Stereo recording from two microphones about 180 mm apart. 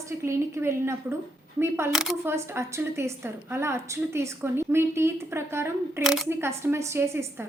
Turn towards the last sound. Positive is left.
turn(degrees=-15)  # may be behind; listen again after turning